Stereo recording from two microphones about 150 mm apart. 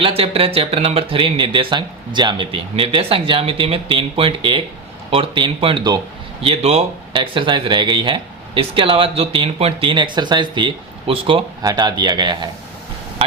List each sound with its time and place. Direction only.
0.0 s speech: 40° right (ahead or behind)
11.6 s speech: 25° right (ahead or behind)